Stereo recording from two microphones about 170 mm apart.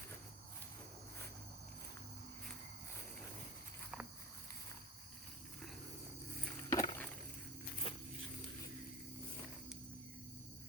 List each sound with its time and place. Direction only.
3.9 s cricket: centre (ahead or behind)
6.7 s rowboat: 20° left (ahead or behind)
7.9 s a sound: 35° left (ahead or behind)